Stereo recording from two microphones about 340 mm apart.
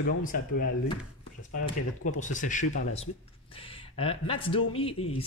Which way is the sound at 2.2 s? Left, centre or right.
Left.